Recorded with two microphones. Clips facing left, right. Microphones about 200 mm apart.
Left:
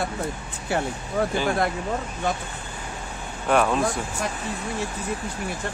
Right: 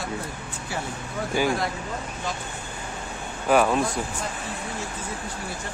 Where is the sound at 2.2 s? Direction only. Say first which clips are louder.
Left 6 dB; 55° left (ahead or behind).